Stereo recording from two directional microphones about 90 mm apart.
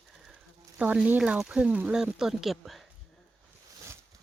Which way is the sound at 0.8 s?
15° right (ahead or behind).